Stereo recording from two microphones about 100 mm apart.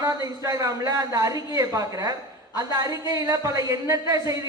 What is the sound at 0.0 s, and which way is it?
A woman's voice, 35° right (ahead or behind).